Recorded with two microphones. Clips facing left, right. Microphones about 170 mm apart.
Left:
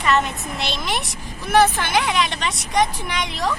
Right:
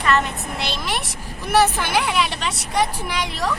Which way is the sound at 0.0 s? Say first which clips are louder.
Even; centre (ahead or behind).